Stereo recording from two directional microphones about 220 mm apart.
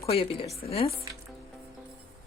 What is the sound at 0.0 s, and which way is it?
Speech, 25° left (ahead or behind).